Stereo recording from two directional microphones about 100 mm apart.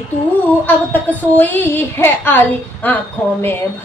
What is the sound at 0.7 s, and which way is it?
A woman's voice, 15° left (ahead or behind).